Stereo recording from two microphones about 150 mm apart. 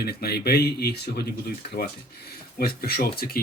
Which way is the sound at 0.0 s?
90° left.